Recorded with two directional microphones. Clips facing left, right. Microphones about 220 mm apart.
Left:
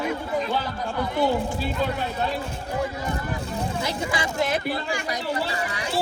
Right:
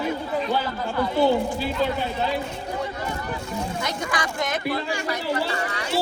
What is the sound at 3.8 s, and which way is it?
Speech, 25° left (ahead or behind).